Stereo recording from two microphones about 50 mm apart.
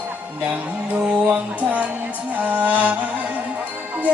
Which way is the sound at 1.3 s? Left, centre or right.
Right.